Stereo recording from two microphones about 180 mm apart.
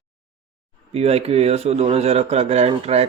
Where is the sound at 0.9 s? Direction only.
35° right (ahead or behind).